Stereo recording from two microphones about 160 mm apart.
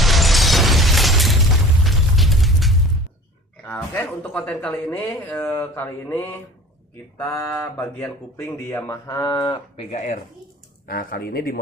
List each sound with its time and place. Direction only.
0.0 s a sound: centre (ahead or behind)
1.8 s music: centre (ahead or behind)
3.7 s speech: 10° left (ahead or behind)
7.2 s mantra: 15° left (ahead or behind)
8.4 s speech: 15° left (ahead or behind); by 10.0 s 35° left (ahead or behind)
10.8 s speech: 65° left (ahead or behind)